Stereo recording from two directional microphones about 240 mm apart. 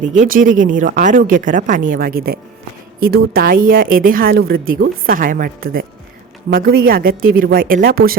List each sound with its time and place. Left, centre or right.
0.1 s a woman's voice: right